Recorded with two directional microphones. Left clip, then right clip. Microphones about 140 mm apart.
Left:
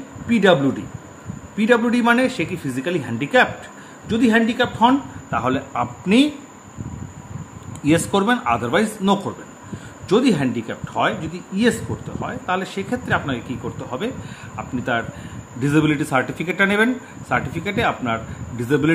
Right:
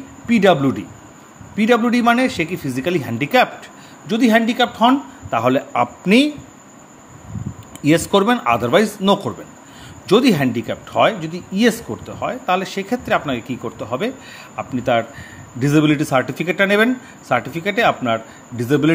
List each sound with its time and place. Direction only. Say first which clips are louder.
0.3 s speech: right 2 dB; 35° right (ahead or behind)
7.8 s speech: right 3 dB; 35° right (ahead or behind)